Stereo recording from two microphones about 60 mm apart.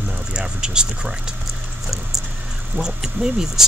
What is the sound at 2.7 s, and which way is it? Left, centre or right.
Speech, centre.